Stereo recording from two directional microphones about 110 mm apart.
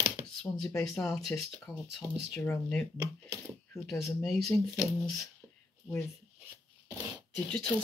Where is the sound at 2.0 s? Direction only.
30° right (ahead or behind).